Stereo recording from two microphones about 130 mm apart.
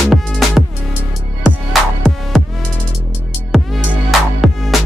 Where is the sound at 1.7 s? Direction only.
Centre (ahead or behind).